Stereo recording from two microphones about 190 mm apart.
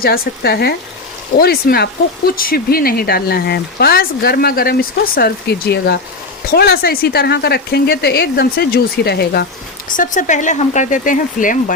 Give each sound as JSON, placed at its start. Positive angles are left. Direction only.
{"t": 0.0, "sound": "speech", "side_deg": 55}
{"t": 9.9, "sound": "speech", "side_deg": 45}